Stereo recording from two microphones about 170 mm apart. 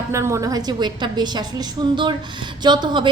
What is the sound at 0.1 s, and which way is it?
A woman's voice, 15° right (ahead or behind).